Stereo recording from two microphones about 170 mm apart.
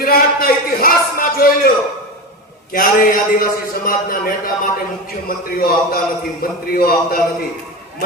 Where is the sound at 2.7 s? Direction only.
55° left (ahead or behind).